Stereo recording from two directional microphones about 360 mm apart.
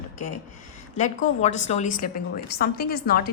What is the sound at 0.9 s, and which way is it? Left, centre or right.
A woman's voice, centre.